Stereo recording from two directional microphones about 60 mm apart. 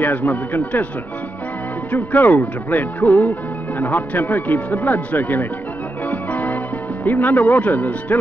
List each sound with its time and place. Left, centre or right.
0.0 s speech: left
1.9 s speech: left
6.0 s organ: left
7.1 s speech: left